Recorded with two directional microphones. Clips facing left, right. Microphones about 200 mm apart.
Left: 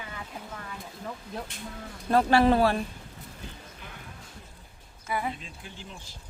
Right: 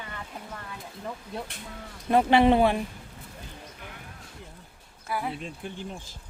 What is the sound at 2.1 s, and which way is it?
Speech, 20° right (ahead or behind).